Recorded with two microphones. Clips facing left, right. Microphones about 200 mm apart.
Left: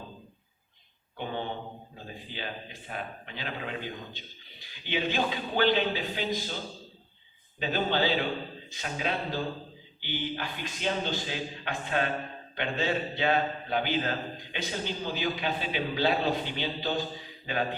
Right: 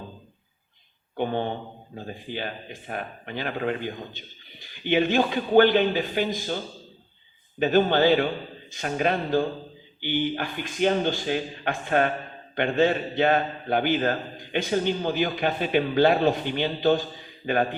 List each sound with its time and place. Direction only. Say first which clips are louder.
1.1 s a man's voice: right 7 dB; 55° right (ahead or behind)
7.6 s a man's voice: right 8 dB; 55° right (ahead or behind)